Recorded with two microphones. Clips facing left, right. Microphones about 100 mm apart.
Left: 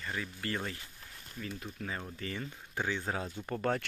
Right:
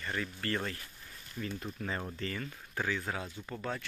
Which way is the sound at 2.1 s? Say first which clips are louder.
Right 1 dB; 15° left (ahead or behind).